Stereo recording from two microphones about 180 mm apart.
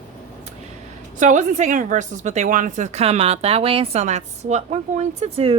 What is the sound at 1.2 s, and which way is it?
A woman's voice, 45° right (ahead or behind).